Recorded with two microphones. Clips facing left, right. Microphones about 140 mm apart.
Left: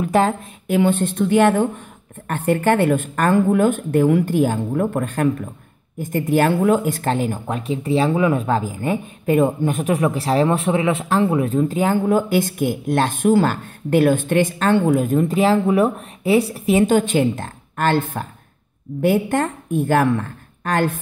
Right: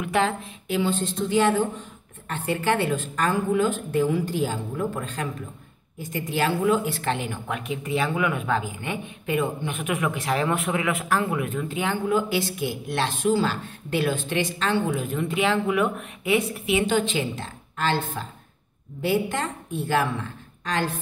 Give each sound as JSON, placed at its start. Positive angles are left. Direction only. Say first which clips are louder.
{"t": 0.0, "sound": "a woman's voice", "louder": "left 6 dB", "side_deg": 40}